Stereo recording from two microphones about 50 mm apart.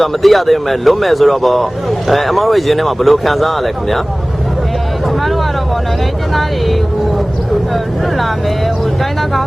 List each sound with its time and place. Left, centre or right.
0.0 s speech: centre